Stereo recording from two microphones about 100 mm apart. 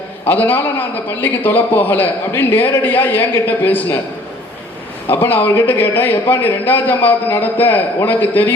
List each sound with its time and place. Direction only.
0.3 s a man's voice: 20° left (ahead or behind)
5.2 s a man's voice: 20° left (ahead or behind)